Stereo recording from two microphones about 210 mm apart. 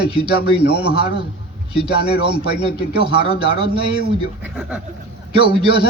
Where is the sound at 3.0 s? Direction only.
50° left (ahead or behind).